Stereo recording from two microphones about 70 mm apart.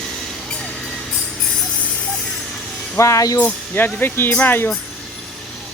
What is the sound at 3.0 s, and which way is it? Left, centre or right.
Speech, left.